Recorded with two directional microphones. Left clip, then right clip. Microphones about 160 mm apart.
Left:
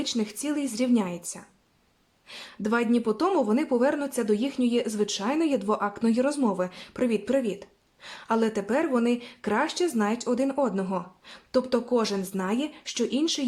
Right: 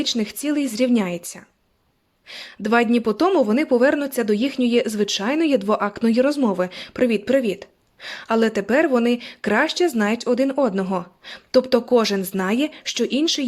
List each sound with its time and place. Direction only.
0.0 s speech: 25° right (ahead or behind)